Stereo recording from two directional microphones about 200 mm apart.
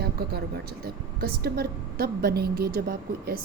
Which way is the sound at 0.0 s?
50° right (ahead or behind).